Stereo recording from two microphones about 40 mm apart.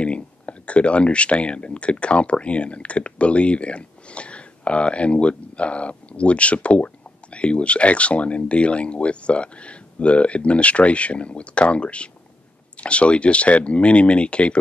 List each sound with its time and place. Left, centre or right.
0.0 s speech: left